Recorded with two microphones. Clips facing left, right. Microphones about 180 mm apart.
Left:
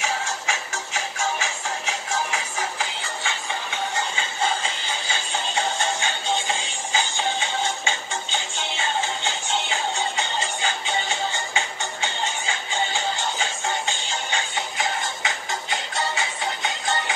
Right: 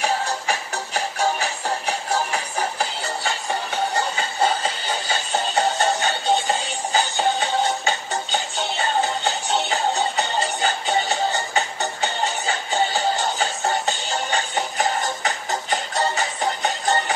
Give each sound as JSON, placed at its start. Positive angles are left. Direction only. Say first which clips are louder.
{"t": 0.0, "sound": "music", "louder": "right 4 dB", "side_deg": -40}